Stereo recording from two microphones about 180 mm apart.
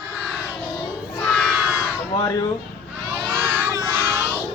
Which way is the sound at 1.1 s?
10° left (ahead or behind).